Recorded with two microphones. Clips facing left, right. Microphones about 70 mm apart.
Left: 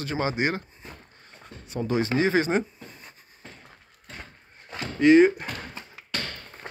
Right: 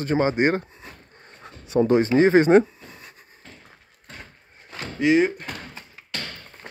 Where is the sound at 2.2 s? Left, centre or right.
Right.